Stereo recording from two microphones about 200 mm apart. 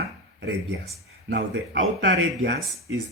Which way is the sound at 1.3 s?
60° right (ahead or behind).